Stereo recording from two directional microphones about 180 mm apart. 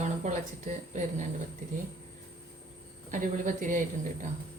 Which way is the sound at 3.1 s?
45° right (ahead or behind).